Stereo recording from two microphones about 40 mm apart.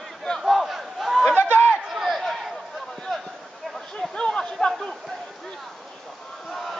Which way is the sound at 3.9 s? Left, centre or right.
Centre.